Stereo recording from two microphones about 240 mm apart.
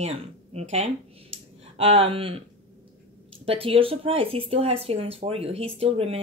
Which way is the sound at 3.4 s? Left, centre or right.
Right.